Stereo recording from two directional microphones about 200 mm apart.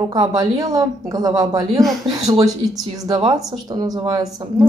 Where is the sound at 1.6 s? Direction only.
Centre (ahead or behind).